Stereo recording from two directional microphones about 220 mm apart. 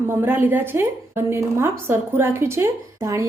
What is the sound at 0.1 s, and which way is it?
A woman's voice, 10° right (ahead or behind).